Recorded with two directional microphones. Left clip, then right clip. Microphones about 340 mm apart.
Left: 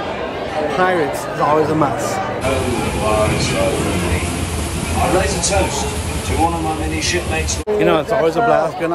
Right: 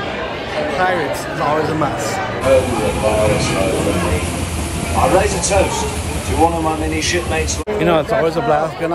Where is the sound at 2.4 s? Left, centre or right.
Centre.